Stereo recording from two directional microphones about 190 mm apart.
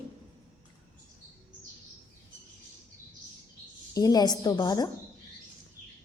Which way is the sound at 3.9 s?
20° left (ahead or behind).